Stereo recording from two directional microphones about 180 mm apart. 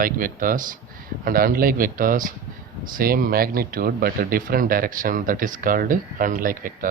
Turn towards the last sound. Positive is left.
turn(degrees=-50)  # may be behind; listen again after turning